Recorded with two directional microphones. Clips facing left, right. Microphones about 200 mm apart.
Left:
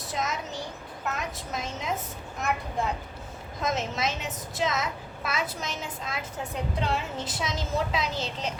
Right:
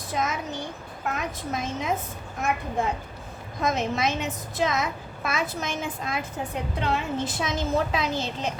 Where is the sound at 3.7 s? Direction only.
55° right (ahead or behind).